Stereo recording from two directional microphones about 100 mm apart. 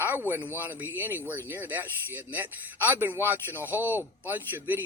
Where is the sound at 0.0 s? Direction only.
20° right (ahead or behind).